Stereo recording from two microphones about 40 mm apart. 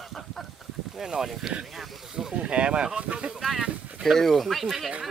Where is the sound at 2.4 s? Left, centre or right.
Right.